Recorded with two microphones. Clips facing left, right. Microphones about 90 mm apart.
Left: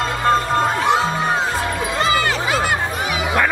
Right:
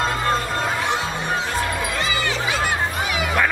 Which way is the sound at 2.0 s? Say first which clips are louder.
Left 5 dB; 40° left (ahead or behind).